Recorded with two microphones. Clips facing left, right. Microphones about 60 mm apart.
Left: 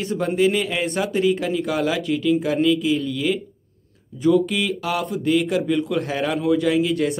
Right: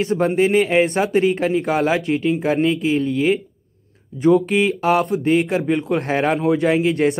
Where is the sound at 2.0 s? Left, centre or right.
Right.